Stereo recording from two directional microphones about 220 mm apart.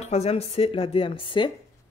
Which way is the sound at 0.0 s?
30° left (ahead or behind).